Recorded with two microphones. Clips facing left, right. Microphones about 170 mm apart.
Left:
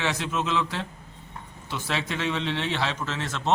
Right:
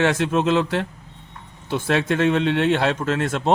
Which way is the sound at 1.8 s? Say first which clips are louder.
Right 10 dB; 55° right (ahead or behind).